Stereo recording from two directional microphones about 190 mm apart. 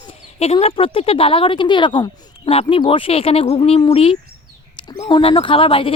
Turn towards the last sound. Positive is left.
turn(degrees=30)  # may be behind; listen again after turning